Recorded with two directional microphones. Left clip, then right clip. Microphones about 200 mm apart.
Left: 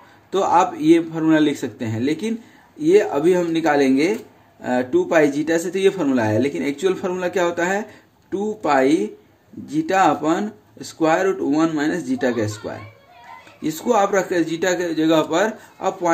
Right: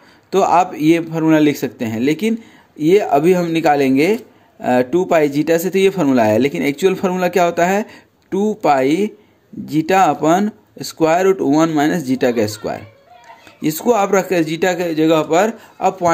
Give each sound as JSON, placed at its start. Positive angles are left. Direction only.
{"t": 0.3, "sound": "speech", "side_deg": -40}